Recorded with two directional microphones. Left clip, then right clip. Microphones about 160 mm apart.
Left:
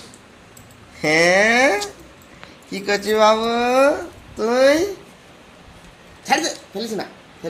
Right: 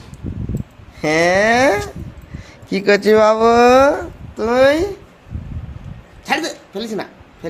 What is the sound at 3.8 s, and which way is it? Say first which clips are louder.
Speech: right 3 dB; 20° right (ahead or behind).